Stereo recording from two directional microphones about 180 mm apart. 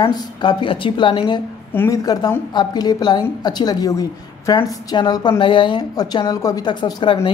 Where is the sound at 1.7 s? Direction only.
15° left (ahead or behind).